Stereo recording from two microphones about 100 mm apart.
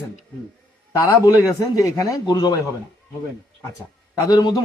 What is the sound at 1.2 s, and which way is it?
Speech, 30° left (ahead or behind).